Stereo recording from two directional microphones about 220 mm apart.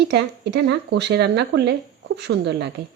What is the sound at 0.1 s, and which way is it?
Speech, 50° right (ahead or behind).